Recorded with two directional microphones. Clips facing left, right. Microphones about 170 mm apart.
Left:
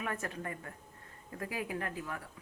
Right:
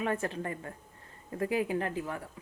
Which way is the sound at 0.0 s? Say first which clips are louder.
Right 6 dB; 25° right (ahead or behind).